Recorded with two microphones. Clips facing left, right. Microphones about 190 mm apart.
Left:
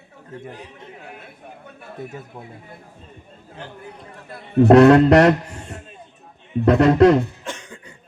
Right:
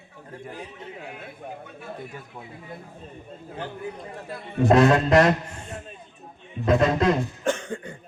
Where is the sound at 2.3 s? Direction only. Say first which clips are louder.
Left 3 dB; 15° left (ahead or behind).